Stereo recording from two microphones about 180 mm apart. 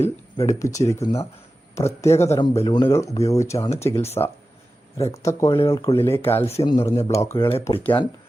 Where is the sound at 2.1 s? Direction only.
35° left (ahead or behind).